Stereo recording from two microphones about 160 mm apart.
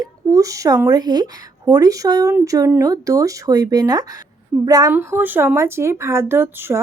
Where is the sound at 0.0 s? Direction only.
20° right (ahead or behind).